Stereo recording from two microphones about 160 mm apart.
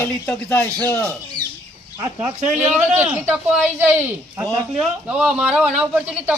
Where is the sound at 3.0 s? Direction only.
15° right (ahead or behind).